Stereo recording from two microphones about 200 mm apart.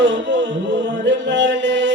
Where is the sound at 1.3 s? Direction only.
65° right (ahead or behind).